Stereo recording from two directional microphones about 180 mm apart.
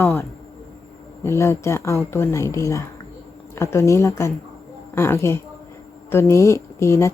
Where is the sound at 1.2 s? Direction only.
15° left (ahead or behind).